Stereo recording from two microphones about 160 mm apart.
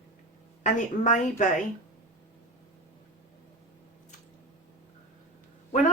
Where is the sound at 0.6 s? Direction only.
50° left (ahead or behind).